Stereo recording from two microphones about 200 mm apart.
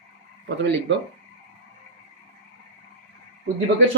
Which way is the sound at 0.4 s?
65° right (ahead or behind).